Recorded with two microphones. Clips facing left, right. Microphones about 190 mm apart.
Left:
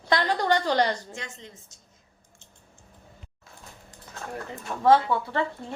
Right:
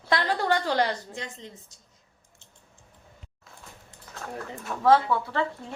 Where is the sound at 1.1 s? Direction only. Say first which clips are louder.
Right 2 dB; 35° right (ahead or behind).